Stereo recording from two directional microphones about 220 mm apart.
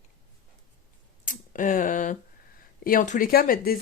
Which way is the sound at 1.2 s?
35° left (ahead or behind).